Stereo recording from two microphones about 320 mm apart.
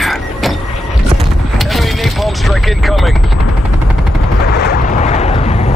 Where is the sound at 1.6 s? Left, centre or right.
Centre.